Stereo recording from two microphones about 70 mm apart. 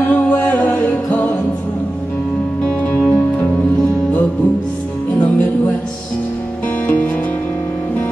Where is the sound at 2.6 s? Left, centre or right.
Centre.